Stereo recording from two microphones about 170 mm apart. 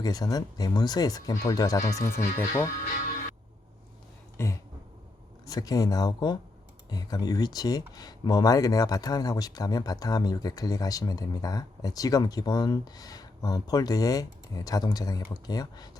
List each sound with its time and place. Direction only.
0.0 s speech: 20° left (ahead or behind)
4.4 s a sound: 15° left (ahead or behind)
5.5 s speech: 20° left (ahead or behind)